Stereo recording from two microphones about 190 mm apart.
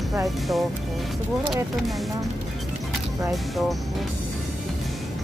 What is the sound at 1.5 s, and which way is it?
Speech, centre (ahead or behind).